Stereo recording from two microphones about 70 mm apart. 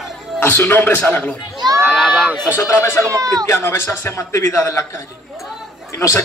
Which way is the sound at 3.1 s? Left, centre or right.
Right.